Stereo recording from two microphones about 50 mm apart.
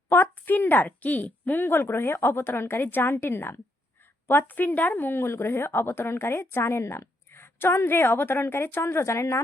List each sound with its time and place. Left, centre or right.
0.1 s a sound: left
0.9 s a woman's voice: left
1.6 s speech: left